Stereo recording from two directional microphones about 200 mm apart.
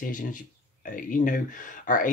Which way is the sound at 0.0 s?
40° left (ahead or behind).